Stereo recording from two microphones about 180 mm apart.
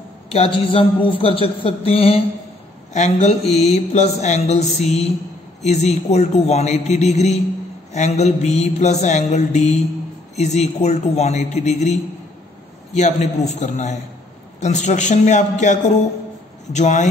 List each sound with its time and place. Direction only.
0.3 s speech: 30° left (ahead or behind)